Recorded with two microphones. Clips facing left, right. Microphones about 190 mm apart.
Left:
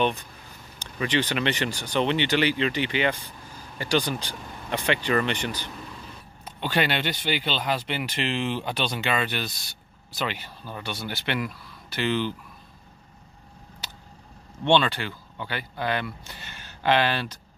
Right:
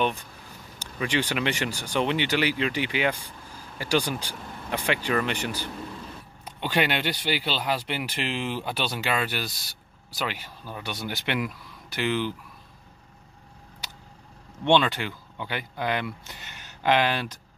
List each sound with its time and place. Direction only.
0.7 s speech: 10° right (ahead or behind)
14.6 s speech: 15° right (ahead or behind)